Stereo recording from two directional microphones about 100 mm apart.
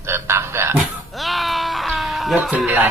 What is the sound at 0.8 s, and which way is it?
Cat, centre (ahead or behind).